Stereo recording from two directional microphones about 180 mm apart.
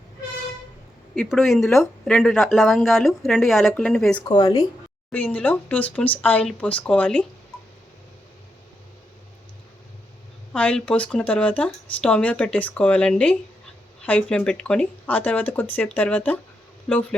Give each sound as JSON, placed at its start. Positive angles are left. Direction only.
{"t": 1.1, "sound": "speech", "side_deg": 0}
{"t": 4.2, "sound": "speech", "side_deg": 25}
{"t": 5.1, "sound": "speech", "side_deg": 10}
{"t": 10.5, "sound": "speech", "side_deg": 5}